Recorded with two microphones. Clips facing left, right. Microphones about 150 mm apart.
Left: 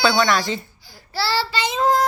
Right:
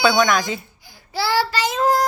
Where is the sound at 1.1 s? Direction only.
15° right (ahead or behind).